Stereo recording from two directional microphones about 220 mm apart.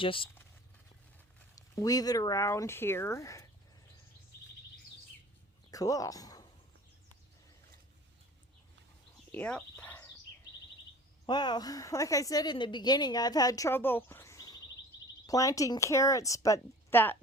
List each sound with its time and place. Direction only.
0.0 s speech: 25° left (ahead or behind)
1.5 s a woman's voice: 15° left (ahead or behind)
5.7 s speech: 15° left (ahead or behind)
9.3 s bird: 5° left (ahead or behind)
11.3 s a woman's voice: 20° left (ahead or behind)